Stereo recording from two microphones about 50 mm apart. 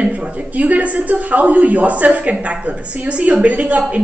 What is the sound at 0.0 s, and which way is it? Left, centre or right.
A woman's voice, right.